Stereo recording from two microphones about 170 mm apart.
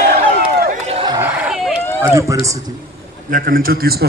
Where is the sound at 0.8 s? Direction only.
35° right (ahead or behind).